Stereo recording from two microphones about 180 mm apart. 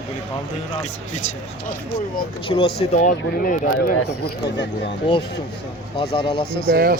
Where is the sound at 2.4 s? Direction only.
30° left (ahead or behind).